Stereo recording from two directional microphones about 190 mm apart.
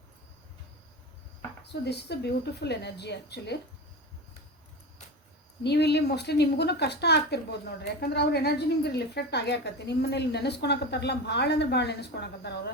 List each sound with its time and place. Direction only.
1.6 s a woman's voice: 60° left (ahead or behind)
5.6 s a woman's voice: 60° left (ahead or behind)